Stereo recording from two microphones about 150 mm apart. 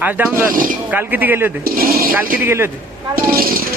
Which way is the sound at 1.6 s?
80° right.